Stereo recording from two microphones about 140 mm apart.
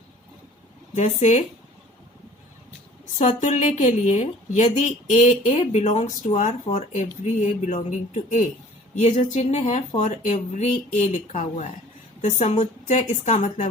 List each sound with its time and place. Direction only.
0.9 s a woman's voice: 55° left (ahead or behind)
3.2 s a woman's voice: 55° left (ahead or behind)